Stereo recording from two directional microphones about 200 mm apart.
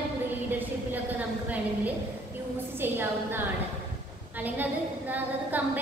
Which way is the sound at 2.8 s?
10° right (ahead or behind).